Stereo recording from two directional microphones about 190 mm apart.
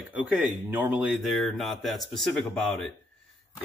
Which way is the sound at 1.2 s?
Centre (ahead or behind).